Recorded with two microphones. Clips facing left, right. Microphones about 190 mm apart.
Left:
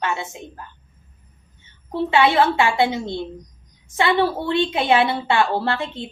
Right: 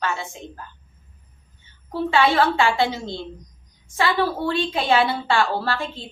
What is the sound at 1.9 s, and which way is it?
A woman's voice, 25° left (ahead or behind).